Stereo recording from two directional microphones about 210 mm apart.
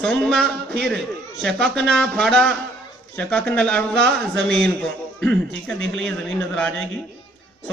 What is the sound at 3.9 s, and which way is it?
Speech, 50° right (ahead or behind).